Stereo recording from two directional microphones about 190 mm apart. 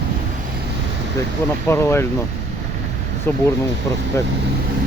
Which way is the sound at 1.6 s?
15° left (ahead or behind).